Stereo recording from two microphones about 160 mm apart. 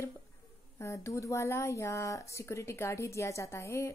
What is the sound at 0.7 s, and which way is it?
Speech, 15° left (ahead or behind).